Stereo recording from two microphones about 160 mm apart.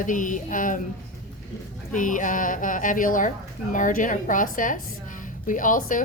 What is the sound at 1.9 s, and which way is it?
A woman's voice, 55° left (ahead or behind).